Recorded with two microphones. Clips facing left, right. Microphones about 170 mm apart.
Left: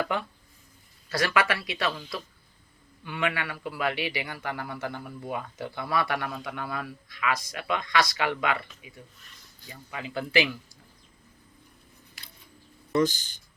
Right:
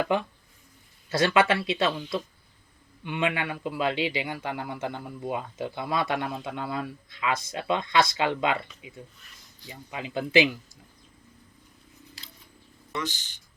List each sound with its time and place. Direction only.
0.0 s a man's voice: 20° right (ahead or behind)
12.9 s speech: 40° left (ahead or behind)